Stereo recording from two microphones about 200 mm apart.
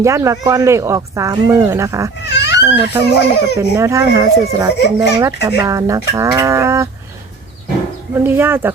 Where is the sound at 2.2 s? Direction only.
60° left (ahead or behind).